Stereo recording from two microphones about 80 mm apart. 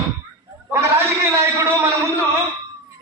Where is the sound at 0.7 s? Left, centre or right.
Right.